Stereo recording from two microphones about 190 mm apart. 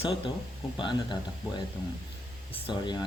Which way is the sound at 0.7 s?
25° left (ahead or behind).